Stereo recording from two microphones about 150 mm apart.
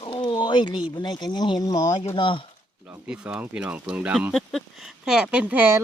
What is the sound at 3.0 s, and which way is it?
Speech, 5° right (ahead or behind).